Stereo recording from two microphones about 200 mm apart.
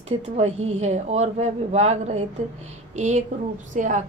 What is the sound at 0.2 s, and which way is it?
Speech, 35° right (ahead or behind).